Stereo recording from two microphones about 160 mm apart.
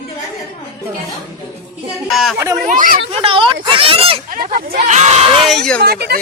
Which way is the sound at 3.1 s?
35° right (ahead or behind).